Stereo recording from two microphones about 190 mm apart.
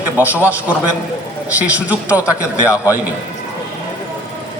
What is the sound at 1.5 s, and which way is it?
Speech, 10° right (ahead or behind).